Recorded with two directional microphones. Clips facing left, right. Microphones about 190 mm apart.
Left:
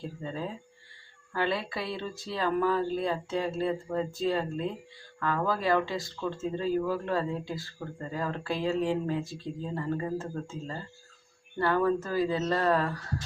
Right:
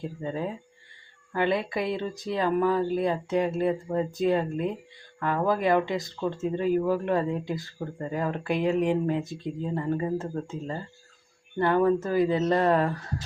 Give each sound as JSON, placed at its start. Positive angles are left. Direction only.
{"t": 0.2, "sound": "speech", "side_deg": -15}